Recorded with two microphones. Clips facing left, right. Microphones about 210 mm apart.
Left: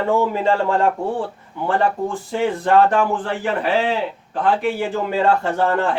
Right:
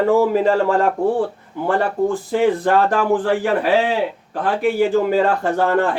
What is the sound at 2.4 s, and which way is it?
A man's voice, 40° right (ahead or behind).